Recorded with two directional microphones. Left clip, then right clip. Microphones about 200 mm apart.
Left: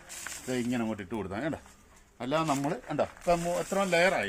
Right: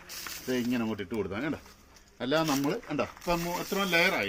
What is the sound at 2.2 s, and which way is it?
Speech, 20° left (ahead or behind).